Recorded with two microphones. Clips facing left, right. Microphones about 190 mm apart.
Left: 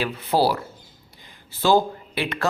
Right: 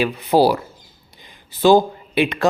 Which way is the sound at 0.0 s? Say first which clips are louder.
Right 6 dB; 15° right (ahead or behind).